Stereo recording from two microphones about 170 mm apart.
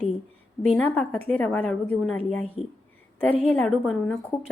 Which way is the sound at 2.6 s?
35° left (ahead or behind).